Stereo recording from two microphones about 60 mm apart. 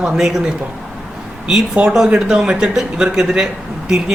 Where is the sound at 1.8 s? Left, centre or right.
Centre.